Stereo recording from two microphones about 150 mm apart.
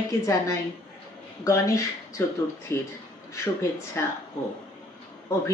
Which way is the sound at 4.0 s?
15° left (ahead or behind).